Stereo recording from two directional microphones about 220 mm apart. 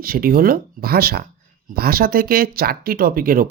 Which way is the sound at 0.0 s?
40° right (ahead or behind).